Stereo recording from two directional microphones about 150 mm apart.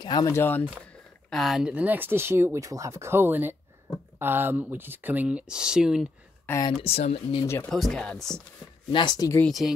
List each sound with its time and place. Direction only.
0.0 s speech: 25° left (ahead or behind)
1.3 s speech: centre (ahead or behind)
6.5 s speech: 15° left (ahead or behind)
6.8 s speech: 40° left (ahead or behind)
7.2 s speech: 25° left (ahead or behind)
7.7 s speech: 5° left (ahead or behind)
8.9 s speech: 30° left (ahead or behind)
9.4 s speech: centre (ahead or behind)